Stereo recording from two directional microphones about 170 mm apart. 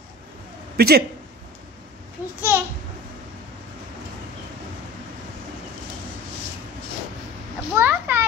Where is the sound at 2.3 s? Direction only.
10° right (ahead or behind).